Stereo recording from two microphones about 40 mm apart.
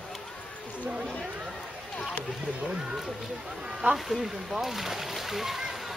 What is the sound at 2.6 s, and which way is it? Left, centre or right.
Speech, centre.